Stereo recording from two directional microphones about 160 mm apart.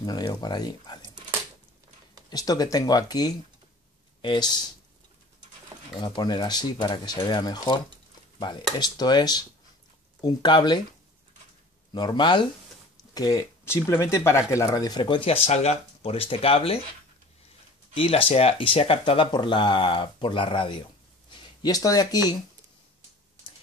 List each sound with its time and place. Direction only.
0.0 s speech: 25° left (ahead or behind)
2.2 s speech: 25° left (ahead or behind)
5.9 s speech: 30° left (ahead or behind)
11.9 s speech: 25° left (ahead or behind)
17.9 s speech: 35° left (ahead or behind)
21.3 s a sound: 25° left (ahead or behind)